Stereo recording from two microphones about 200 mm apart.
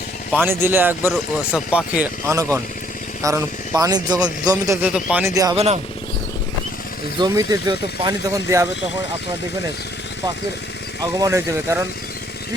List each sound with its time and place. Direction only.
0.3 s speech: 10° right (ahead or behind)
5.5 s speech: 30° right (ahead or behind)
7.2 s speech: 20° right (ahead or behind)
11.2 s speech: 10° right (ahead or behind)